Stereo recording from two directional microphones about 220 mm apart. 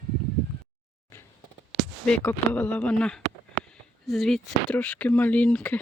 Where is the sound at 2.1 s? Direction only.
5° left (ahead or behind).